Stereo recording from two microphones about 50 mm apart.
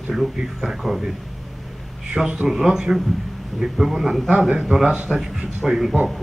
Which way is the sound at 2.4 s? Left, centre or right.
Centre.